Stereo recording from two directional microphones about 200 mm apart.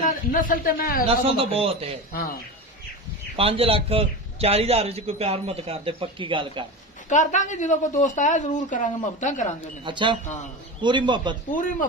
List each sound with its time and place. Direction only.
0.0 s speech: 45° left (ahead or behind)
1.0 s a man's voice: 30° right (ahead or behind)
3.3 s a man's voice: 30° right (ahead or behind)
7.1 s a woman's voice: 35° left (ahead or behind)
9.8 s a man's voice: 25° right (ahead or behind)